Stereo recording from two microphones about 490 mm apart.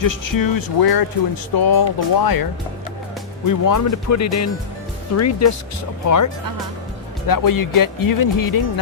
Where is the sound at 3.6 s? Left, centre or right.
Left.